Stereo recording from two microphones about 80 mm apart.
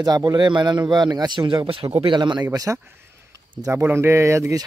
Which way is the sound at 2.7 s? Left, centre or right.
Right.